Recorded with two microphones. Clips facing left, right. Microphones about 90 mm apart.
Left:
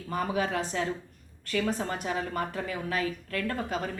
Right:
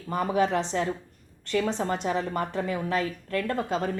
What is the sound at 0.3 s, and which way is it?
A woman's voice, 30° right (ahead or behind).